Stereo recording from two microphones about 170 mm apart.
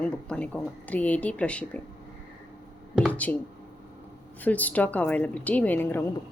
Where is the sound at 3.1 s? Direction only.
10° left (ahead or behind).